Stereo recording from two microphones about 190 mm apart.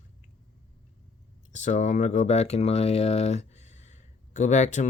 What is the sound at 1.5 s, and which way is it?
Speech, 40° left (ahead or behind).